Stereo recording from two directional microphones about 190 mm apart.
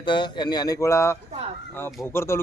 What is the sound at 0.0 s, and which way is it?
A man's voice, 25° left (ahead or behind).